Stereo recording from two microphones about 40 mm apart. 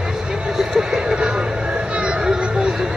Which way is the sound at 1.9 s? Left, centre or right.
Centre.